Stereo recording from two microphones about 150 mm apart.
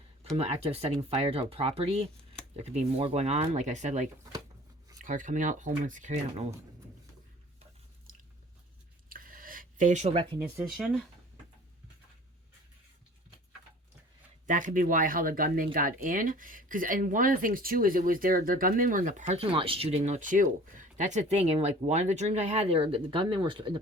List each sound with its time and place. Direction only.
0.3 s speech: 45° right (ahead or behind)
8.1 s biting: 70° right (ahead or behind)
9.0 s a sound: 70° right (ahead or behind); by 10.2 s 45° right (ahead or behind)
10.6 s speech: 5° right (ahead or behind)
14.4 s speech: 60° right (ahead or behind); by 20.1 s 40° right (ahead or behind)
20.1 s speech: 60° right (ahead or behind); by 23.7 s 30° right (ahead or behind)